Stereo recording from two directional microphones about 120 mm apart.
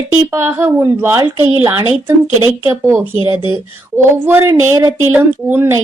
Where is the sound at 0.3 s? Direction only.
20° right (ahead or behind).